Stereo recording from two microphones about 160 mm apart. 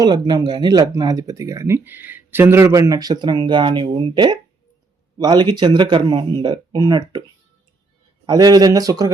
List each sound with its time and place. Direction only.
0.0 s speech: 25° right (ahead or behind)
8.3 s speech: 25° right (ahead or behind)